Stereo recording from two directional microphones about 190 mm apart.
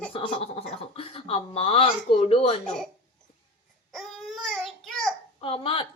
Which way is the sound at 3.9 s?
Centre (ahead or behind).